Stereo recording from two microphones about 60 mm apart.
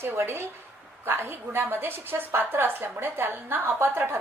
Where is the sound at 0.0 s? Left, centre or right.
Right.